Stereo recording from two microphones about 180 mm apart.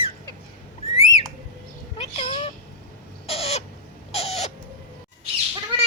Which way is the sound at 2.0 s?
35° left (ahead or behind).